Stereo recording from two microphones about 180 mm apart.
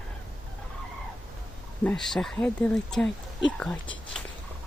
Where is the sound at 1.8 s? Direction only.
5° left (ahead or behind).